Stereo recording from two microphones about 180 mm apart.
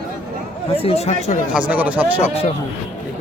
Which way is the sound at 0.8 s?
35° left (ahead or behind).